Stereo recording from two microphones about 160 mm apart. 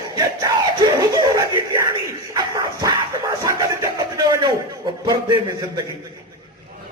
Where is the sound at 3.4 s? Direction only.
25° right (ahead or behind).